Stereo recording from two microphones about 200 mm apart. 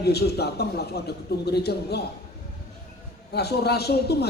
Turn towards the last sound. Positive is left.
turn(degrees=55)  # may be behind; listen again after turning